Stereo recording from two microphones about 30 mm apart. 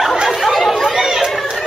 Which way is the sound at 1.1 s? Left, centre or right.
Centre.